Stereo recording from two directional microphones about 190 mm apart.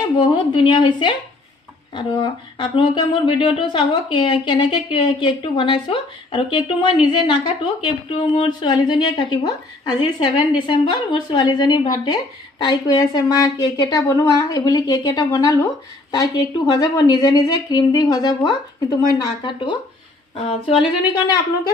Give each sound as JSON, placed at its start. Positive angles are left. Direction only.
{"t": 0.0, "sound": "a woman's voice", "side_deg": 25}